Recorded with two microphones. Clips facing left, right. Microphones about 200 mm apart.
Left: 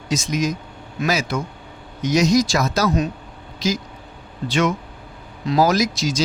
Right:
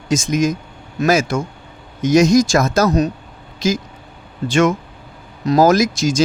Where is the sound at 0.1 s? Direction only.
50° right (ahead or behind).